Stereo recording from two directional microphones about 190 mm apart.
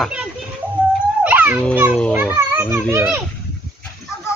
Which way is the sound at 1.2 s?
10° right (ahead or behind).